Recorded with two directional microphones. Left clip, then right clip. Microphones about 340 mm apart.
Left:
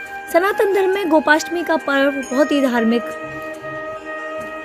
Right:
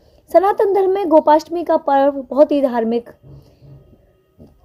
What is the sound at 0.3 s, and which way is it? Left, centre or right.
Speech, left.